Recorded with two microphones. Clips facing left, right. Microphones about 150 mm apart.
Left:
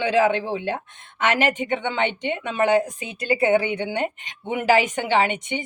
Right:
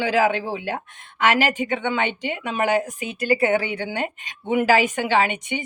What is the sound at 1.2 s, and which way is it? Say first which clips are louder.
A woman's voice: right 1 dB; 20° left (ahead or behind).